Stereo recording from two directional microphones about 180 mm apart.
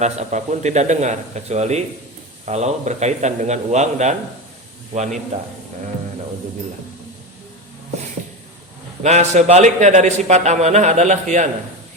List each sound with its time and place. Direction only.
0.0 s a man's voice: 40° right (ahead or behind)
9.0 s a man's voice: 40° right (ahead or behind)